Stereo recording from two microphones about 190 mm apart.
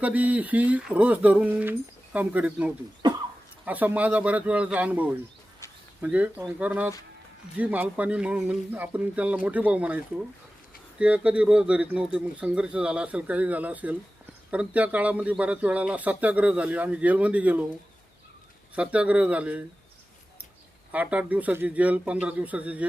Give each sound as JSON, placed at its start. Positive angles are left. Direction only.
{"t": 0.0, "sound": "speech", "side_deg": -10}
{"t": 3.0, "sound": "cough", "side_deg": -25}
{"t": 3.7, "sound": "speech", "side_deg": -10}
{"t": 18.7, "sound": "speech", "side_deg": -5}
{"t": 20.9, "sound": "speech", "side_deg": -5}